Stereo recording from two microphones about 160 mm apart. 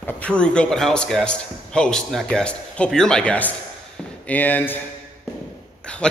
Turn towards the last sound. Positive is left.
turn(degrees=10)  # may be behind; listen again after turning